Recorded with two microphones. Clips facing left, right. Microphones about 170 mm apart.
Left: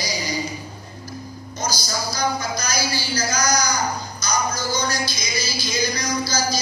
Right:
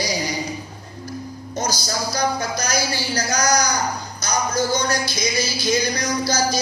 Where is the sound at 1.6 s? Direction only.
60° right (ahead or behind).